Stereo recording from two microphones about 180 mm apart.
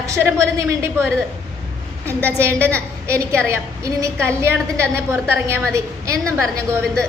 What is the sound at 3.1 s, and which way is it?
A woman's voice, 15° right (ahead or behind).